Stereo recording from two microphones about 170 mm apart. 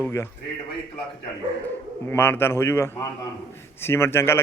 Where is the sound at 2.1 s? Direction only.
10° left (ahead or behind).